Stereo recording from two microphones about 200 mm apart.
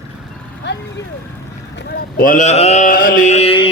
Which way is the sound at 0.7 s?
60° left (ahead or behind).